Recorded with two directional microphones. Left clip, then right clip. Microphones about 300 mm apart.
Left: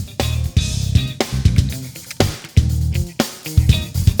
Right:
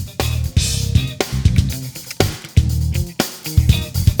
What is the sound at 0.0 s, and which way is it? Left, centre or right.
Music, centre.